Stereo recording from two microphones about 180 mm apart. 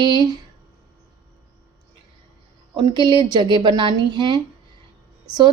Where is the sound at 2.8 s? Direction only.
25° right (ahead or behind).